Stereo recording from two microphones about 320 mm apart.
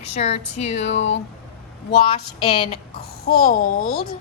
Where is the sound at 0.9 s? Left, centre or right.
Left.